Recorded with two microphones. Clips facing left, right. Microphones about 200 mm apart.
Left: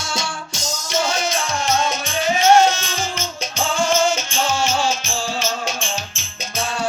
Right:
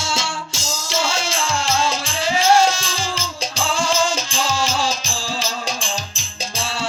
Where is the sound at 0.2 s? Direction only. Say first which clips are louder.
Even; 25° right (ahead or behind).